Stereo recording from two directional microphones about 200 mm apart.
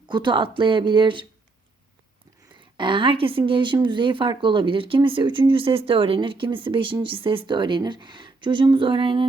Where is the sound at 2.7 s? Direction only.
25° right (ahead or behind).